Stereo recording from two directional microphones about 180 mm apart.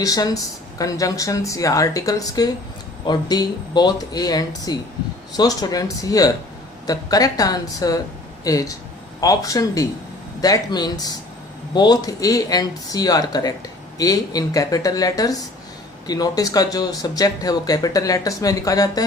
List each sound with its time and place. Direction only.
0.0 s speech: 20° left (ahead or behind)